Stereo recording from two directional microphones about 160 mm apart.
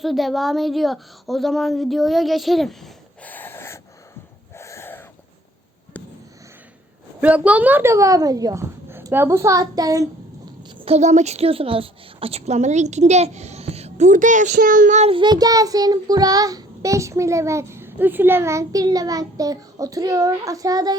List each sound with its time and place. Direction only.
0.0 s speech: centre (ahead or behind); by 3.8 s 15° left (ahead or behind)
4.5 s a sound: 15° left (ahead or behind)
7.2 s speech: 10° right (ahead or behind)
10.6 s a woman's voice: 40° right (ahead or behind)
15.1 s child singing: 25° right (ahead or behind)